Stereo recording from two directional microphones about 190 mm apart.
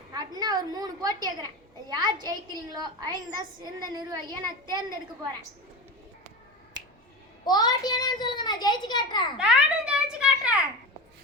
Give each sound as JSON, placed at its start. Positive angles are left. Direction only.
{"t": 0.1, "sound": "a woman's voice", "side_deg": -20}
{"t": 7.4, "sound": "a child's voice", "side_deg": 20}
{"t": 9.4, "sound": "a child's voice", "side_deg": -5}